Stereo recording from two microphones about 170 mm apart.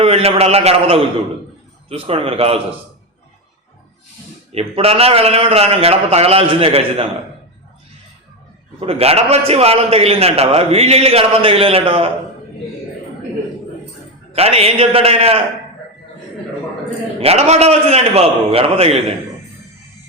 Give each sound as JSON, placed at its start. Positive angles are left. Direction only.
{"t": 0.0, "sound": "a man's voice", "side_deg": -35}
{"t": 4.5, "sound": "a man's voice", "side_deg": -35}
{"t": 8.8, "sound": "a man's voice", "side_deg": -35}
{"t": 14.3, "sound": "a man's voice", "side_deg": -35}
{"t": 17.2, "sound": "a man's voice", "side_deg": -40}